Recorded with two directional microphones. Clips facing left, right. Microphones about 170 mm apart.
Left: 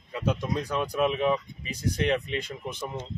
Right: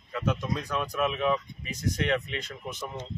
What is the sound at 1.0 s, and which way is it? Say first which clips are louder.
Speech: left 2 dB; 20° left (ahead or behind).